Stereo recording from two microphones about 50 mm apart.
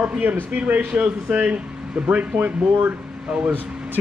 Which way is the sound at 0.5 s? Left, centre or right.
Right.